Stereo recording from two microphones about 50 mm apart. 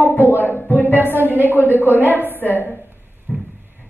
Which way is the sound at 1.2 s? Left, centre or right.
Left.